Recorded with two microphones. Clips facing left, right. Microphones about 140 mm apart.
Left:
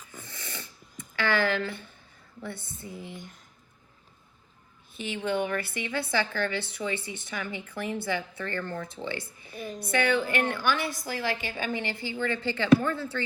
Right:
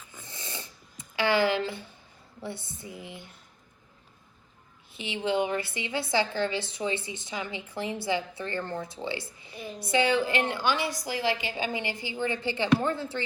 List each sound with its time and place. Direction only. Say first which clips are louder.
0.1 s snoring: even; 20° right (ahead or behind)
1.1 s a woman's voice: right 2 dB; 15° right (ahead or behind)
2.5 s speech: right 2 dB; 50° left (ahead or behind)
2.8 s a woman's voice: left 3 dB; 15° right (ahead or behind)
5.4 s a woman's voice: right 1 dB; 20° right (ahead or behind)
9.0 s a woman's voice: right 1 dB; 55° left (ahead or behind)
9.9 s a woman's voice: right 1 dB; 20° right (ahead or behind)
10.8 s speech: right 1 dB; 50° left (ahead or behind)
11.0 s a woman's voice: right 2 dB; 15° right (ahead or behind)